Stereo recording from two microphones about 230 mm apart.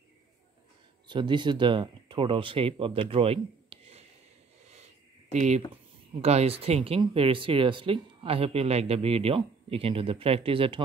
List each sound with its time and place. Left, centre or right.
1.0 s speech: centre
5.3 s speech: right